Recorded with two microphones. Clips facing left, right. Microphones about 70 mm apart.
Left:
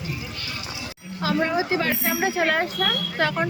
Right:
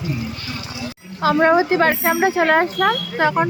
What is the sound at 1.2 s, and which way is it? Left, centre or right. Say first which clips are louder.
Speech: right 8 dB; right.